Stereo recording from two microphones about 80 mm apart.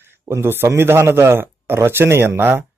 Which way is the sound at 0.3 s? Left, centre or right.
Right.